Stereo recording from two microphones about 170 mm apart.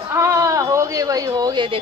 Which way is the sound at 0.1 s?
15° right (ahead or behind).